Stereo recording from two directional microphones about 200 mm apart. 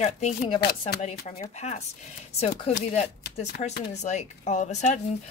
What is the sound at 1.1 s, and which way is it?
A woman's voice, 35° left (ahead or behind).